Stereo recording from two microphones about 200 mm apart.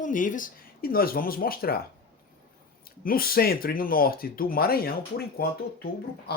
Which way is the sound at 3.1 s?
45° left (ahead or behind).